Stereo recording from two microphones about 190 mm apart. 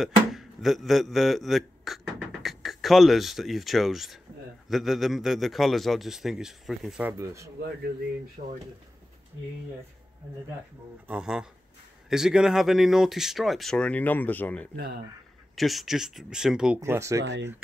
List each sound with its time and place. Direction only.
0.3 s a man's voice: centre (ahead or behind)
11.1 s a man's voice: 5° right (ahead or behind)
17.2 s speech: 65° right (ahead or behind)